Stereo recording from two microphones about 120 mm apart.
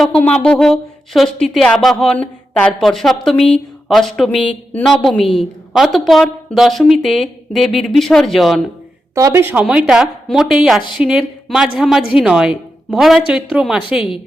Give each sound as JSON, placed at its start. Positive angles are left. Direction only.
{"t": 0.2, "sound": "a woman's voice", "side_deg": 10}
{"t": 9.1, "sound": "speech", "side_deg": -25}
{"t": 9.6, "sound": "a woman's voice", "side_deg": -5}